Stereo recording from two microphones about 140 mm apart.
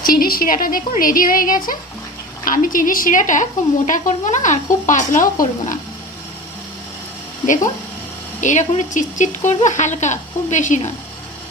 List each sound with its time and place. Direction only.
0.0 s a woman's voice: 90° left; by 5.7 s 70° left (ahead or behind)
7.4 s speech: 65° left (ahead or behind)